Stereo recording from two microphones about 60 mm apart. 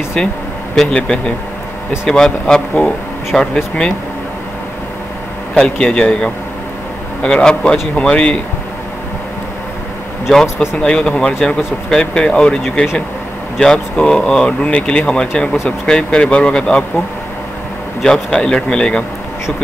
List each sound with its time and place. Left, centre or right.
0.9 s speech: centre
5.5 s speech: centre
10.3 s speech: centre
10.8 s speech: centre
18.0 s speech: centre